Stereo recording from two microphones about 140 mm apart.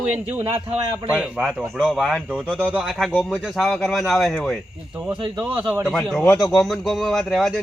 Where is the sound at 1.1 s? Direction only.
5° right (ahead or behind).